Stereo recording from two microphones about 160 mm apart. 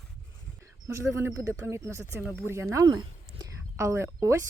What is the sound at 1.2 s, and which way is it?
Speech, 15° right (ahead or behind).